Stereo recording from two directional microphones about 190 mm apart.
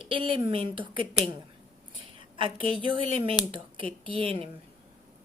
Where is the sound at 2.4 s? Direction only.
30° right (ahead or behind).